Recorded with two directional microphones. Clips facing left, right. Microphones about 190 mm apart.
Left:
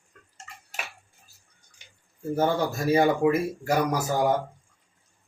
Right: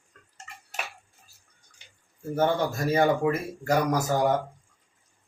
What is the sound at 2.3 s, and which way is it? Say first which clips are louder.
Speech: even; 10° left (ahead or behind).